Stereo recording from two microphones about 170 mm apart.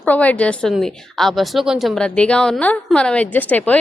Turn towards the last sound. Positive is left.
turn(degrees=10)  # may be behind; listen again after turning